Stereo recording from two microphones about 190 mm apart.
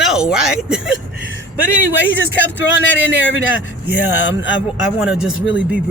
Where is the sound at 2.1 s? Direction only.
75° left (ahead or behind).